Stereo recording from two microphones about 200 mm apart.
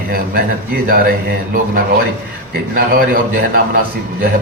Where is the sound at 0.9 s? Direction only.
45° right (ahead or behind).